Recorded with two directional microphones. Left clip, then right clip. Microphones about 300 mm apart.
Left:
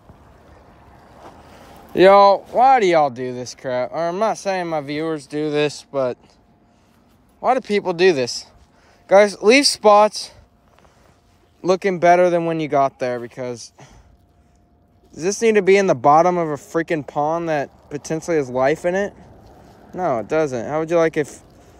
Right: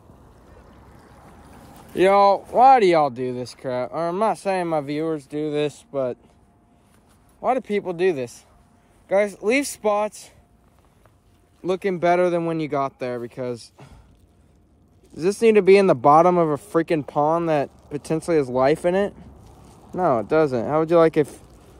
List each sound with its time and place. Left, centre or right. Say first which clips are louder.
2.0 s speech: left 5 dB; centre
7.3 s speech: left 4 dB; centre
11.6 s speech: left 6 dB; centre
15.1 s speech: even; centre